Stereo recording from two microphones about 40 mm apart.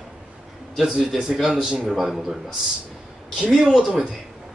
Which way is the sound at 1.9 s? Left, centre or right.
Centre.